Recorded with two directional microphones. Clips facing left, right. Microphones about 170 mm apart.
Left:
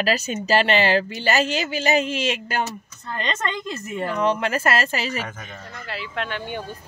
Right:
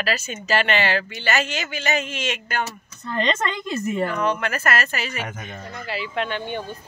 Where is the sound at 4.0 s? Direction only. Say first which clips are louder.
Left 5 dB; 30° left (ahead or behind).